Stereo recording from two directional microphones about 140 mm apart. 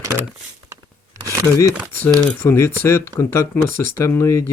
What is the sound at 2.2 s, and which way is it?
Speech, 15° left (ahead or behind).